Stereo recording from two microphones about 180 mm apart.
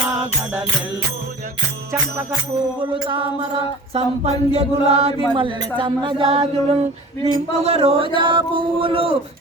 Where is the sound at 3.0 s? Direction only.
30° right (ahead or behind).